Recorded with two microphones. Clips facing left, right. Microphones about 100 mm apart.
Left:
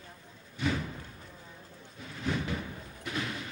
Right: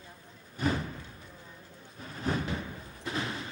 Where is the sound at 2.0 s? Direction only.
40° right (ahead or behind).